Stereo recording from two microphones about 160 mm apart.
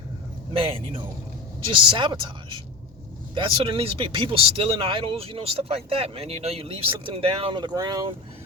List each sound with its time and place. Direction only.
1.6 s speech: 30° right (ahead or behind)